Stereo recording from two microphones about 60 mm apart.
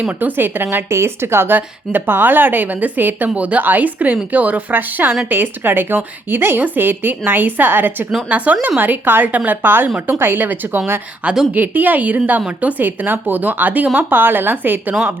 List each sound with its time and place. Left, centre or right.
0.2 s a woman's voice: right
8.3 s a woman's voice: right